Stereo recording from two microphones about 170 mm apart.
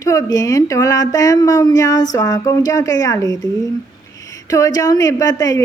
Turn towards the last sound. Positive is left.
turn(degrees=20)  # may be behind; listen again after turning